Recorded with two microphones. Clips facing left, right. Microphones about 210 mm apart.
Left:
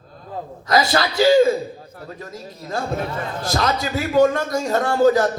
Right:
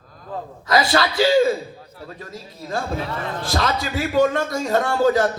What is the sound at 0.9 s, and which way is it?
A man's voice, 45° left (ahead or behind).